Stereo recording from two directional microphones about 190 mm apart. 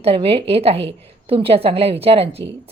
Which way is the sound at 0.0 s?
30° right (ahead or behind).